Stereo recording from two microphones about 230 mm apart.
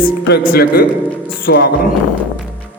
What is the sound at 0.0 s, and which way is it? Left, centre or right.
Speech, left.